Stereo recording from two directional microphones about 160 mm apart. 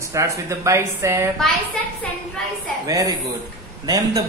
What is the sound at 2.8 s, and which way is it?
A man's voice, 20° right (ahead or behind).